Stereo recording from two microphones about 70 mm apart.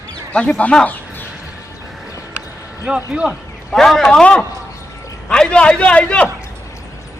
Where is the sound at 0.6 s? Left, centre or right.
Centre.